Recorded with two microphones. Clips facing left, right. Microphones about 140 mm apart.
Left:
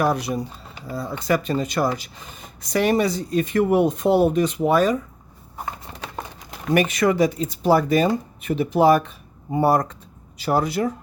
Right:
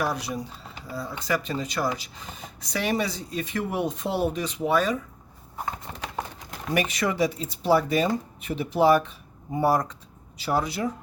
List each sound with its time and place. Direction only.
0.0 s speech: 55° left (ahead or behind)
6.7 s speech: 50° left (ahead or behind)